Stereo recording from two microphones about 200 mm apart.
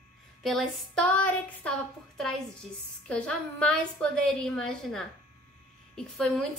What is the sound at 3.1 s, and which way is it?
A woman's voice, 5° left (ahead or behind).